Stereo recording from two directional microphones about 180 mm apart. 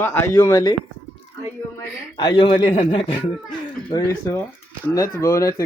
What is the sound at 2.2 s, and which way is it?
Speech, 25° left (ahead or behind).